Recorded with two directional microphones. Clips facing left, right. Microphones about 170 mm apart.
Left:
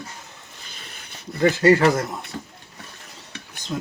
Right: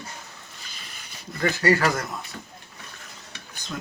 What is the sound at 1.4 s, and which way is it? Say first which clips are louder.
Speech: left 6 dB; 25° left (ahead or behind).